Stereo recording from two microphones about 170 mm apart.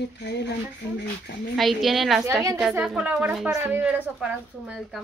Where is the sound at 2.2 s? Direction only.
20° right (ahead or behind).